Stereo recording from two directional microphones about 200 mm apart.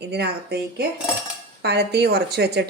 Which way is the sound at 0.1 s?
55° right (ahead or behind).